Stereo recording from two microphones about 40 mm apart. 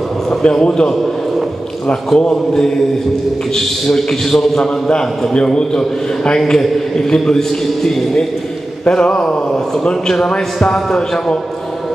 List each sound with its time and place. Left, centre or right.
0.4 s a man's voice: left
2.1 s a man's voice: centre
8.8 s a man's voice: left